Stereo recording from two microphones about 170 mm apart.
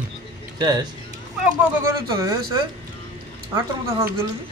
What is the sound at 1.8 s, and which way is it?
Speech, 20° right (ahead or behind).